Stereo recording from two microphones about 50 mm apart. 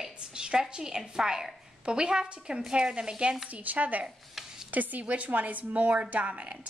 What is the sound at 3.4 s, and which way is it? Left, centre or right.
A woman's voice, right.